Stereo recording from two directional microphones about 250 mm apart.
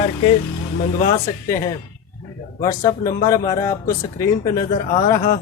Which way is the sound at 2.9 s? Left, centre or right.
Centre.